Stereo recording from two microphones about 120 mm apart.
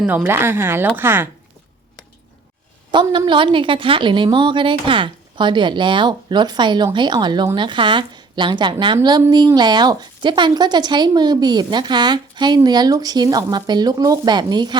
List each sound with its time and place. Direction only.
0.1 s speech: 20° right (ahead or behind)
2.9 s a woman's voice: 40° right (ahead or behind)